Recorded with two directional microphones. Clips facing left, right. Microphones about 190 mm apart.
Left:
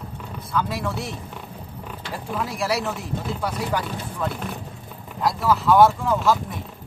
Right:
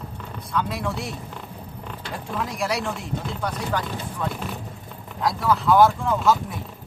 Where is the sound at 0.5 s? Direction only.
Centre (ahead or behind).